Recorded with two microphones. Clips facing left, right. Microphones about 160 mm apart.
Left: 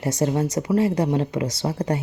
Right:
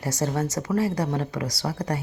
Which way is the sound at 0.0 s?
20° left (ahead or behind).